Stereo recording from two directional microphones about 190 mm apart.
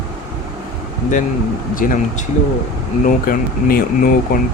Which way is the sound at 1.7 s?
45° left (ahead or behind).